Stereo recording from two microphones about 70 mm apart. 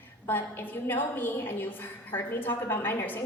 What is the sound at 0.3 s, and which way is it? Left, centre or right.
A woman's voice, left.